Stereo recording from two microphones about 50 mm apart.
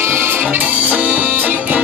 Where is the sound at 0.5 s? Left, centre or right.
Right.